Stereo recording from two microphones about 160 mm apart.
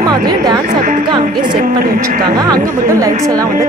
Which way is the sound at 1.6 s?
60° right (ahead or behind).